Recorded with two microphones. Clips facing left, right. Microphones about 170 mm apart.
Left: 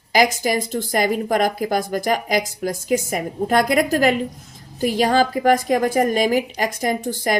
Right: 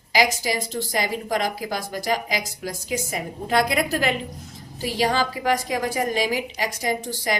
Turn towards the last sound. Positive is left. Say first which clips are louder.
# left 4 dB
turn(degrees=50)  # may be behind; listen again after turning